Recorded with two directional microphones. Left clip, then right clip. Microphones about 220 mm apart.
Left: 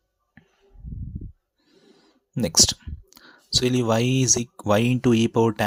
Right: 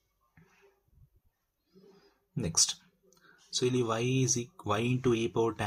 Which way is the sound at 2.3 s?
40° left (ahead or behind).